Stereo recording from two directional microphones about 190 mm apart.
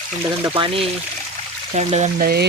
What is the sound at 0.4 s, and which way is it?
Speech, 25° right (ahead or behind).